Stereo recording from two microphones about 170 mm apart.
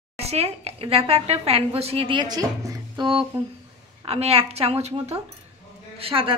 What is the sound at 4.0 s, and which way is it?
A woman's voice, 35° right (ahead or behind).